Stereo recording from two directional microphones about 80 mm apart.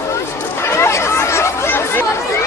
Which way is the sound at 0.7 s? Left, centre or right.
Left.